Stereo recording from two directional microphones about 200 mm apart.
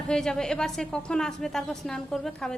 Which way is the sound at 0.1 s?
5° left (ahead or behind).